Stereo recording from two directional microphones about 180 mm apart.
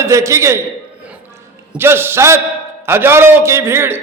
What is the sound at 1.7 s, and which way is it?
A man's voice, 15° right (ahead or behind).